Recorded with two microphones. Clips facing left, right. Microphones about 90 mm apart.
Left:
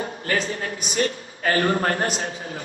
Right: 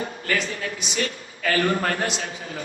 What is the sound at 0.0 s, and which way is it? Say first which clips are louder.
A man's voice: left 1 dB; 35° left (ahead or behind).